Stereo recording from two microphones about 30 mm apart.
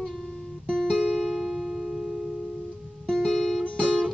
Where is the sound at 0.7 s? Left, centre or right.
Left.